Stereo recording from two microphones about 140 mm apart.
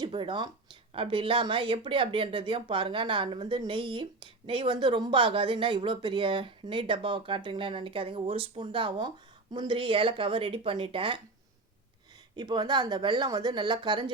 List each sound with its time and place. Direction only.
0.0 s speech: 35° right (ahead or behind)
12.4 s speech: 30° right (ahead or behind)